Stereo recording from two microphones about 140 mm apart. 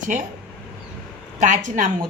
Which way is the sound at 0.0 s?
65° right (ahead or behind).